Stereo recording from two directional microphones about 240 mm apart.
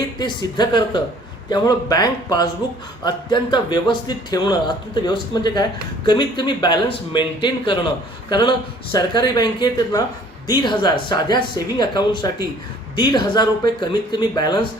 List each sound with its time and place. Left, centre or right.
0.2 s speech: centre